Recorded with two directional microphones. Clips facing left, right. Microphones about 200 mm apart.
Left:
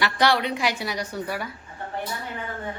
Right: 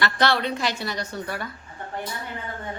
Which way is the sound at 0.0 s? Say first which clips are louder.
Left 1 dB; 15° left (ahead or behind).